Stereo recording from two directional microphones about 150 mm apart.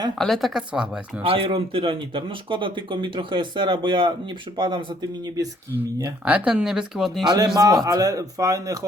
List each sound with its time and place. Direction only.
0.2 s speech: centre (ahead or behind)
1.2 s speech: 35° right (ahead or behind)
6.2 s speech: 10° right (ahead or behind)
7.3 s speech: 25° right (ahead or behind)